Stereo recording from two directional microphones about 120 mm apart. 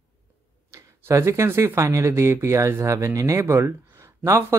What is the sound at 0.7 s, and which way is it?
Speech, 25° right (ahead or behind).